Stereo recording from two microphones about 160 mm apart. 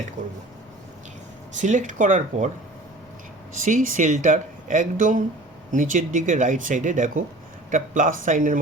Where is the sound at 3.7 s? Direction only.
55° right (ahead or behind).